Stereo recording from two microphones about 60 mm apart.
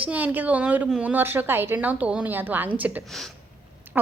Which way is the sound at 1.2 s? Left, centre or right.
Right.